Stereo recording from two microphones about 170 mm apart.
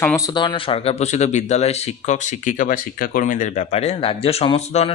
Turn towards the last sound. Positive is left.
turn(degrees=35)  # may be behind; listen again after turning